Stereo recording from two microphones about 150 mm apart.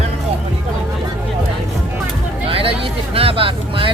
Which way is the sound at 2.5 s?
40° right (ahead or behind).